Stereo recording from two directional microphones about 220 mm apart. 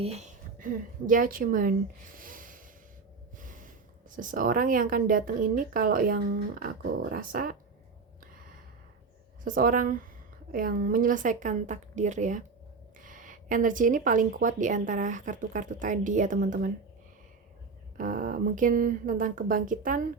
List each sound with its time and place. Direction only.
0.0 s a woman's voice: 30° right (ahead or behind)
2.1 s a sound: 40° right (ahead or behind)
3.3 s gasp: 35° right (ahead or behind)
4.1 s speech: 35° right (ahead or behind)
9.4 s speech: 40° right (ahead or behind)
17.9 s speech: 40° right (ahead or behind)